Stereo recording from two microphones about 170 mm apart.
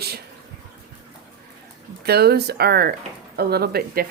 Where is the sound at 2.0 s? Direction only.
70° right (ahead or behind).